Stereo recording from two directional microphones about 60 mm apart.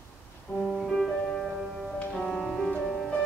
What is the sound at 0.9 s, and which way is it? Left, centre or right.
Music, centre.